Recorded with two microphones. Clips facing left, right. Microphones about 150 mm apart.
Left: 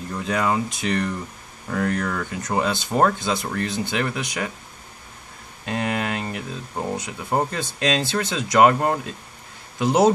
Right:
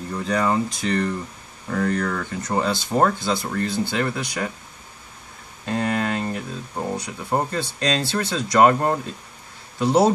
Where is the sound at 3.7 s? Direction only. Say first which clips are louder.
Right 3 dB; 20° left (ahead or behind).